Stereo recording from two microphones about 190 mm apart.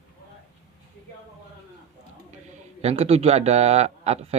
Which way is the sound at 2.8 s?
35° right (ahead or behind).